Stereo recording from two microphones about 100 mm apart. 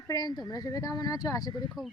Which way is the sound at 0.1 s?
40° left (ahead or behind).